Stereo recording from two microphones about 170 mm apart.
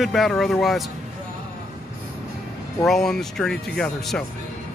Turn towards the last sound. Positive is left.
turn(degrees=5)  # may be behind; listen again after turning